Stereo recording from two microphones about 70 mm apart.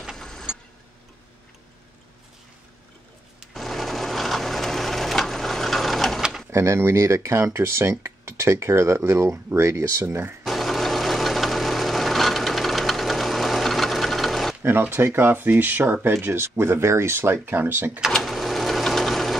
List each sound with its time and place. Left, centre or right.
0.1 s vehicle: centre
3.5 s sewing machine: centre
6.5 s speech: right
10.4 s engine: centre
14.6 s speech: right
18.2 s sewing machine: centre